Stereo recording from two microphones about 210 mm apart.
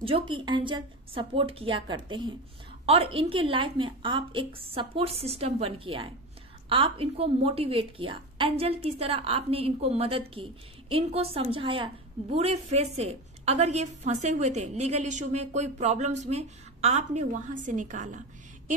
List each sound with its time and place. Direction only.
0.0 s a woman's voice: 25° right (ahead or behind)